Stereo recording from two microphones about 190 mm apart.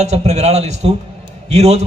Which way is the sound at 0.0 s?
35° right (ahead or behind).